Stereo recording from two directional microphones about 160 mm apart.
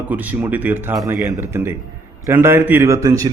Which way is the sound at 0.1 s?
10° right (ahead or behind).